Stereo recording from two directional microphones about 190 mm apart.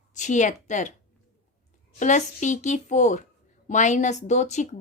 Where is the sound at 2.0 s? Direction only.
40° left (ahead or behind).